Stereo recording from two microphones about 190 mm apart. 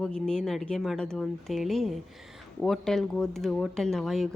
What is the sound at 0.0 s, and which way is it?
Speech, 5° left (ahead or behind).